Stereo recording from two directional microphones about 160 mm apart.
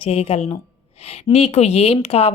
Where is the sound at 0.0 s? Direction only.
35° left (ahead or behind).